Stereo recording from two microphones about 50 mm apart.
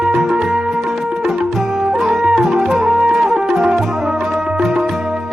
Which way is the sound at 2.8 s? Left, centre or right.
Centre.